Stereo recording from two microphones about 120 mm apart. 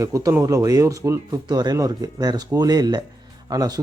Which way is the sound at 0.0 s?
25° right (ahead or behind).